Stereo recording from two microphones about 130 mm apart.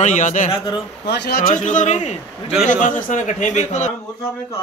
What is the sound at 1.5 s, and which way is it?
A man's voice, 75° left (ahead or behind).